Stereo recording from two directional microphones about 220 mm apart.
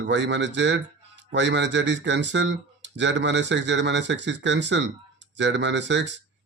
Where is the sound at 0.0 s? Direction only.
55° right (ahead or behind).